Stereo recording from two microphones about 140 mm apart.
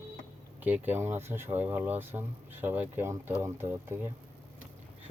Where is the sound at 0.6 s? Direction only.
15° right (ahead or behind).